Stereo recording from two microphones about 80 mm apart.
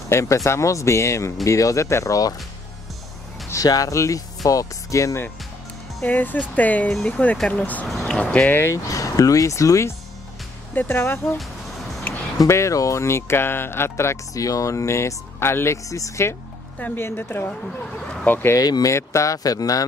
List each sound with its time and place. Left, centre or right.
0.1 s speech: left
3.6 s speech: left
6.0 s speech: left
6.9 s speech: centre
7.4 s speech: centre
8.5 s speech: left
10.7 s speech: left
12.4 s speech: left
16.7 s speech: left
17.5 s speech: centre
18.3 s speech: left
18.6 s speech: left